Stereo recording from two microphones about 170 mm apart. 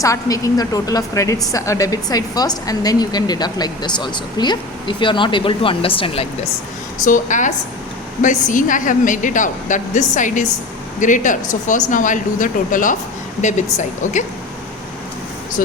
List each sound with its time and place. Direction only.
0.0 s a woman's voice: 20° left (ahead or behind)
7.0 s a woman's voice: 50° left (ahead or behind)